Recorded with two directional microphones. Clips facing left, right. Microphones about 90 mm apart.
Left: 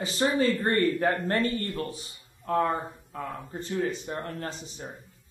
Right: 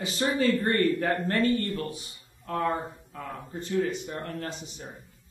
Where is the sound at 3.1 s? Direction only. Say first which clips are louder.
Left 4 dB; 30° left (ahead or behind).